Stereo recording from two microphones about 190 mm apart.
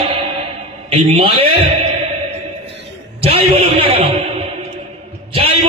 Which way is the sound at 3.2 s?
30° right (ahead or behind).